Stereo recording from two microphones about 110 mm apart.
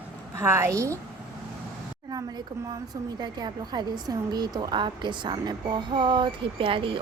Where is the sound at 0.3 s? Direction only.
25° right (ahead or behind).